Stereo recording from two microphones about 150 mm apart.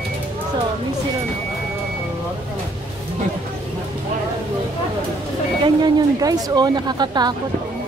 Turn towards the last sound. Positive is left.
turn(degrees=-30)  # may be behind; listen again after turning